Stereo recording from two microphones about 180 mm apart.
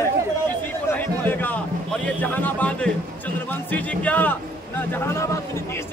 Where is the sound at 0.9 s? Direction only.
10° left (ahead or behind).